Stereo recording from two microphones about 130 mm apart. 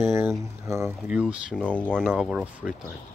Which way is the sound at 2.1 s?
5° right (ahead or behind).